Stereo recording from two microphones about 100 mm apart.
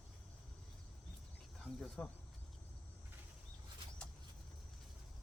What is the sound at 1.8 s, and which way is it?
Speech, 10° left (ahead or behind).